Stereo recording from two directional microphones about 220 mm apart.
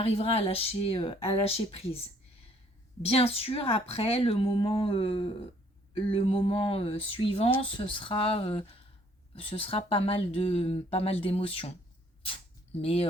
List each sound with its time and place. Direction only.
0.0 s speech: 25° left (ahead or behind)
3.0 s speech: 25° left (ahead or behind)
12.8 s speech: 25° left (ahead or behind)